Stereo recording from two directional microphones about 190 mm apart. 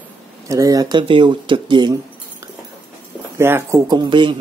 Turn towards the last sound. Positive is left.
turn(degrees=-25)  # may be behind; listen again after turning